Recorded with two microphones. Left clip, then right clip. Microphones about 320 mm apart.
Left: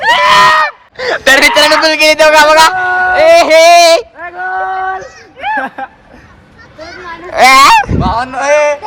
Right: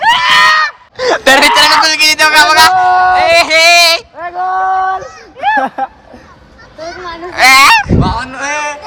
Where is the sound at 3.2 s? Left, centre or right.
Centre.